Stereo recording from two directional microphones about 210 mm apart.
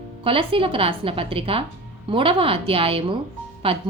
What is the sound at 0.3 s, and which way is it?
A woman's voice, 25° right (ahead or behind).